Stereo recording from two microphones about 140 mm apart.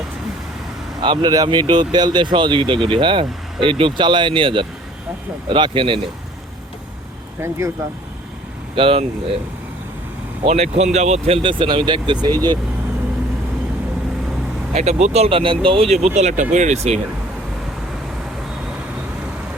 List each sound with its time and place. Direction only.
1.0 s speech: 30° right (ahead or behind)
7.4 s speech: 15° right (ahead or behind)
8.7 s speech: 40° right (ahead or behind)
10.4 s speech: 50° right (ahead or behind)
11.4 s speech: 40° right (ahead or behind)
14.7 s speech: 50° right (ahead or behind)